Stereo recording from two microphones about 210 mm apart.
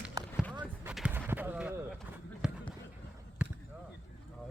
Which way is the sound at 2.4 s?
5° right (ahead or behind).